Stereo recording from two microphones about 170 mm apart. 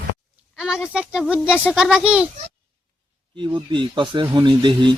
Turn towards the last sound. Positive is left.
turn(degrees=-30)  # may be behind; listen again after turning